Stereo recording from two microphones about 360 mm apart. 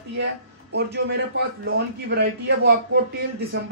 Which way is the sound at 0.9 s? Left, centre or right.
Right.